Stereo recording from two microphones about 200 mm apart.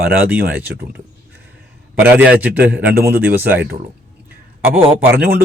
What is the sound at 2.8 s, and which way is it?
Speech, 50° right (ahead or behind).